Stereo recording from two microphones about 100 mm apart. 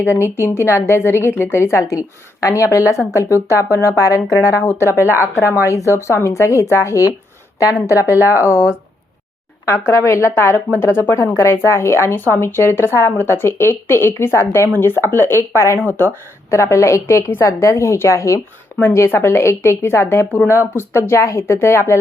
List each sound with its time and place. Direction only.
0.1 s speech: 25° left (ahead or behind)